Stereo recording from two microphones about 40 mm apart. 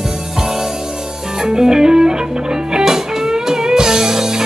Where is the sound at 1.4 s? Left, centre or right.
Centre.